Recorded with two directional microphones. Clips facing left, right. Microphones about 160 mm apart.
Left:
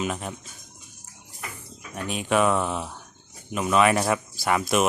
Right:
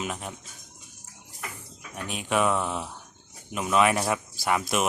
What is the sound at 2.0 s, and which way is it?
Speech, 5° right (ahead or behind).